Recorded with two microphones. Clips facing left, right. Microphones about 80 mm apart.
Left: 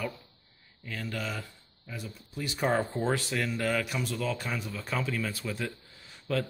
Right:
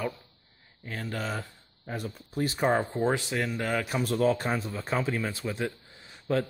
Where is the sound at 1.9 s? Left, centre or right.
Right.